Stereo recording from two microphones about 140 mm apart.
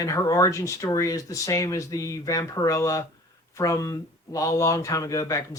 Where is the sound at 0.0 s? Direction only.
25° left (ahead or behind).